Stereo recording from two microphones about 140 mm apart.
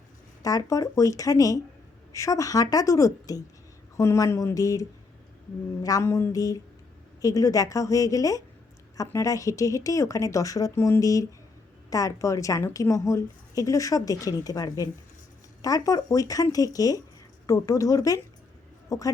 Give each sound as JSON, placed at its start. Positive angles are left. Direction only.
{"t": 0.4, "sound": "a woman's voice", "side_deg": 25}